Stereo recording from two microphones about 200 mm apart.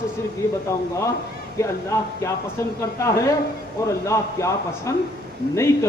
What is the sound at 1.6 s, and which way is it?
Speech, 15° left (ahead or behind).